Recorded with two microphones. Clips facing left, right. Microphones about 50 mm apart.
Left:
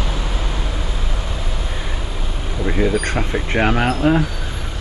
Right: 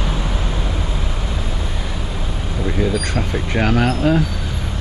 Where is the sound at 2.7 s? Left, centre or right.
Centre.